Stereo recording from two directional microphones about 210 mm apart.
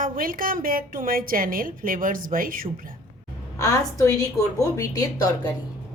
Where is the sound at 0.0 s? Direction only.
40° right (ahead or behind).